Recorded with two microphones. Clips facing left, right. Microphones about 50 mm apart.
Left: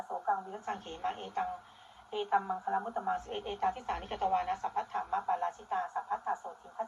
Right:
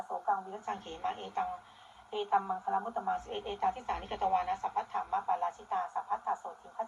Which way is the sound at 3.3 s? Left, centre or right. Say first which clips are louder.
Even; centre.